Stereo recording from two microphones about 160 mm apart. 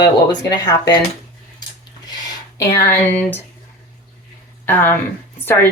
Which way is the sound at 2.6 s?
20° left (ahead or behind).